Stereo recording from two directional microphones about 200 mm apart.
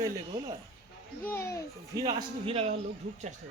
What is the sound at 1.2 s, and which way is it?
Speech, 10° left (ahead or behind).